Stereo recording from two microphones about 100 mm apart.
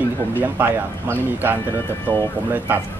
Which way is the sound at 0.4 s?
20° right (ahead or behind).